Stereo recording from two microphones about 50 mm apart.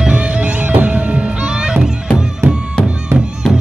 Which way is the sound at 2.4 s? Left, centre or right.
Right.